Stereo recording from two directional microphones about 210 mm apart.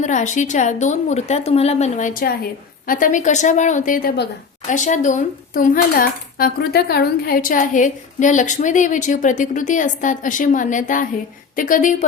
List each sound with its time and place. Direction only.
0.0 s speech: 35° left (ahead or behind)